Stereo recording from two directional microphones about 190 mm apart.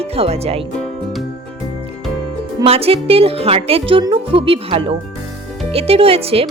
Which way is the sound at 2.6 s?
30° right (ahead or behind).